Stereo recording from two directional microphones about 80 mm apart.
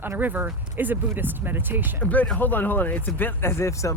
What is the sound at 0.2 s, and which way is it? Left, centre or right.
Speech, right.